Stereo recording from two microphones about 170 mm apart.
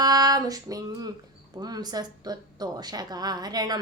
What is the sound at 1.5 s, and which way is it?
Child singing, 25° right (ahead or behind).